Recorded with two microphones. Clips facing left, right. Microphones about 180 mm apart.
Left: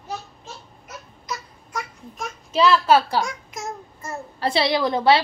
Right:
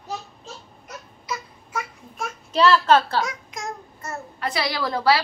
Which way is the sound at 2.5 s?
5° left (ahead or behind).